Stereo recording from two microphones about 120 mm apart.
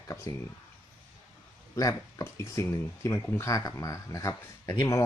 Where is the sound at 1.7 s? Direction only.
30° left (ahead or behind).